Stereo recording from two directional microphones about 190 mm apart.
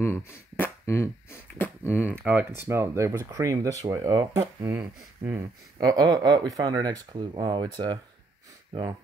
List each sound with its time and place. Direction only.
0.0 s a sound: 15° left (ahead or behind)
2.6 s speech: 15° right (ahead or behind)
4.7 s speech: 10° right (ahead or behind)